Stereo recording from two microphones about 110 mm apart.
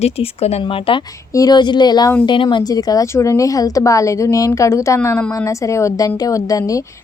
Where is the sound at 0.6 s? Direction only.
50° left (ahead or behind).